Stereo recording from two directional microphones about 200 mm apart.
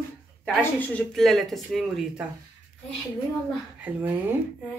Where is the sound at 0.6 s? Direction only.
10° left (ahead or behind).